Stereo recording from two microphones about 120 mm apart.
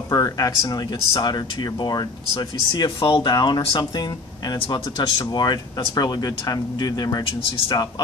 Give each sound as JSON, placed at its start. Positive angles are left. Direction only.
{"t": 0.1, "sound": "speech", "side_deg": 30}